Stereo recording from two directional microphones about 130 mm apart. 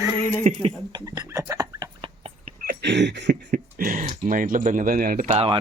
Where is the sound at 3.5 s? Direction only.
90° right.